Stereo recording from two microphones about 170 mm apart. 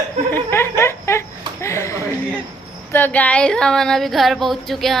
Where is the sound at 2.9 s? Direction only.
10° left (ahead or behind).